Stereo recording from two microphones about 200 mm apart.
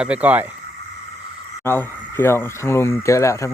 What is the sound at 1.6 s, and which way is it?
Speech, 10° left (ahead or behind).